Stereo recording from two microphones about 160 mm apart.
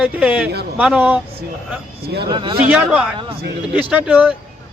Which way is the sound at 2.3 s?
30° right (ahead or behind).